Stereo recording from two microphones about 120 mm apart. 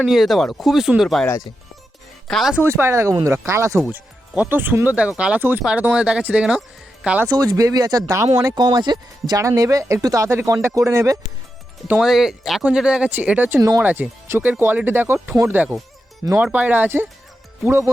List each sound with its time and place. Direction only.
0.0 s speech: centre (ahead or behind)
2.6 s speech: 20° right (ahead or behind)
7.3 s speech: 30° right (ahead or behind)
11.9 s speech: 5° right (ahead or behind)
13.6 s speech: 25° right (ahead or behind)